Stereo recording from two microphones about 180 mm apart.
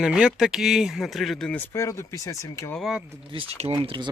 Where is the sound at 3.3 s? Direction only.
30° right (ahead or behind).